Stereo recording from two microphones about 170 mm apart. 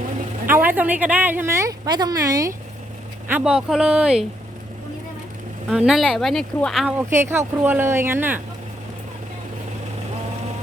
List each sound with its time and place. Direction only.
0.5 s speech: 10° right (ahead or behind)
3.2 s speech: 5° right (ahead or behind)
5.6 s speech: 5° right (ahead or behind)
6.8 s speech: 15° right (ahead or behind)